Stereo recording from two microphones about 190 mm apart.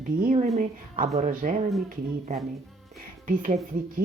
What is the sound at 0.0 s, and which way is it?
Speech, 45° right (ahead or behind).